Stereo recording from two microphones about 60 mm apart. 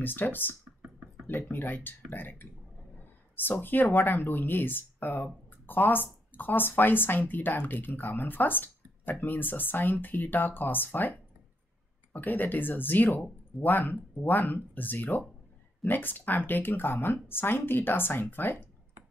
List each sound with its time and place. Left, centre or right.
0.0 s speech: left
3.4 s speech: left